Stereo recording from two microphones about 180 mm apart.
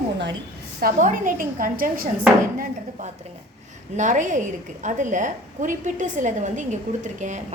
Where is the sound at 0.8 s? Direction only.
45° right (ahead or behind).